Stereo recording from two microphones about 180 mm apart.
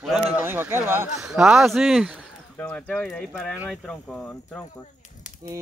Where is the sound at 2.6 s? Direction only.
5° left (ahead or behind).